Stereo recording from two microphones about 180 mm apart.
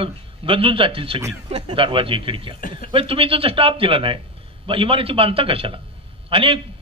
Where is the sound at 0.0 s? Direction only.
30° right (ahead or behind).